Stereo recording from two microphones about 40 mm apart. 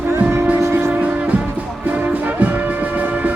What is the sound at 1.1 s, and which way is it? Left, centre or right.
Music, right.